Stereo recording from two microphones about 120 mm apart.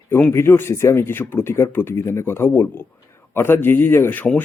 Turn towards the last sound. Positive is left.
turn(degrees=10)  # may be behind; listen again after turning